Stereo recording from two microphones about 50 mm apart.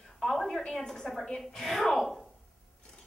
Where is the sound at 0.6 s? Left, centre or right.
Centre.